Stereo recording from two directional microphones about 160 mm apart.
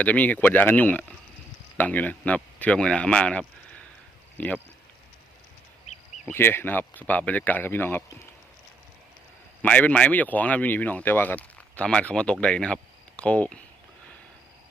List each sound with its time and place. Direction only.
0.0 s speech: 10° left (ahead or behind)
6.2 s speech: 15° left (ahead or behind)
9.6 s speech: 10° left (ahead or behind)